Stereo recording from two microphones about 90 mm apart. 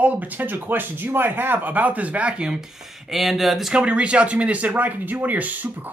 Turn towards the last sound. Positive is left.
turn(degrees=-20)  # may be behind; listen again after turning